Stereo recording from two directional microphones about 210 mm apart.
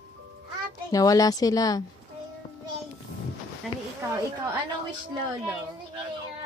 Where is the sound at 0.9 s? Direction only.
15° left (ahead or behind).